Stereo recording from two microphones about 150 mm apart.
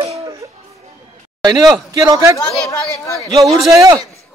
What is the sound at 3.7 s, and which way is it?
Speech, 20° right (ahead or behind).